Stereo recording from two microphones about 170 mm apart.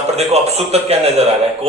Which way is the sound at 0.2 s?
40° right (ahead or behind).